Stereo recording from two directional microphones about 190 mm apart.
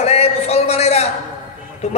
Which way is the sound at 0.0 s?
35° left (ahead or behind).